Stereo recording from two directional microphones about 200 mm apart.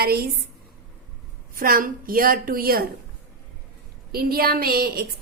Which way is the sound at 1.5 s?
45° right (ahead or behind).